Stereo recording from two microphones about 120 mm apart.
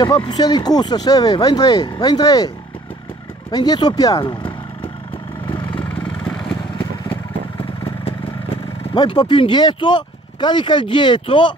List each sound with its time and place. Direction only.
0.0 s speech: 35° left (ahead or behind)
3.5 s speech: 35° left (ahead or behind)
5.5 s vehicle: 45° left (ahead or behind)
8.9 s speech: 40° left (ahead or behind)